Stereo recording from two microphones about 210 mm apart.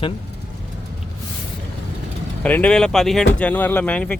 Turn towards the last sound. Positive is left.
turn(degrees=5)  # may be behind; listen again after turning